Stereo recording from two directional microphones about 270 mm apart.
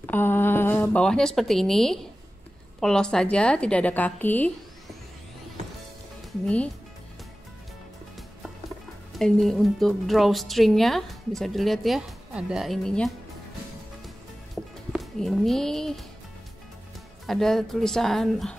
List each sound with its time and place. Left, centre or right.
0.0 s speech: centre
6.4 s speech: centre
9.2 s speech: centre
14.0 s music: centre
17.3 s speech: centre